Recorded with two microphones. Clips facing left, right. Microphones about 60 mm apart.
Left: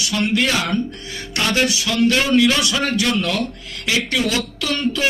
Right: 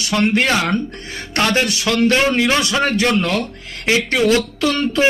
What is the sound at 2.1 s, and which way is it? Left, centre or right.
A man's voice, right.